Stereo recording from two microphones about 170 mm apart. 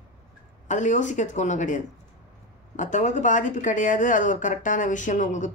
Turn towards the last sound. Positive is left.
turn(degrees=45)  # may be behind; listen again after turning